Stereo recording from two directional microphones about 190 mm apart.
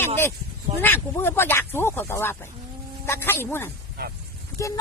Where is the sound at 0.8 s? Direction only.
10° left (ahead or behind).